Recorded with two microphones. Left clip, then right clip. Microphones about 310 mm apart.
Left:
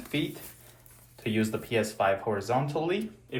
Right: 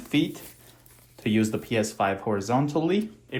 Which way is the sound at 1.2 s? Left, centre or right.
Right.